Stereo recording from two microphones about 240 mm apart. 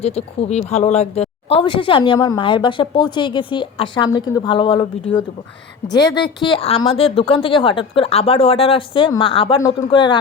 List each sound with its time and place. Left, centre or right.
0.0 s speech: left